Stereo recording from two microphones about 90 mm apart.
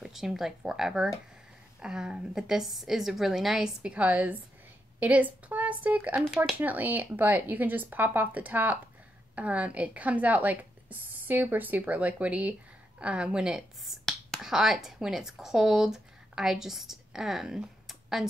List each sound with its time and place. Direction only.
0.0 s a woman's voice: 5° right (ahead or behind)